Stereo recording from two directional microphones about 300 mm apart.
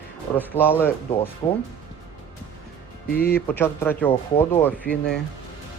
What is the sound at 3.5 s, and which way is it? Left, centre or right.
A man's voice, centre.